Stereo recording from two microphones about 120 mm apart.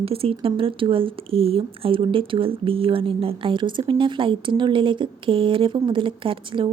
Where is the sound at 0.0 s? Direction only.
55° right (ahead or behind).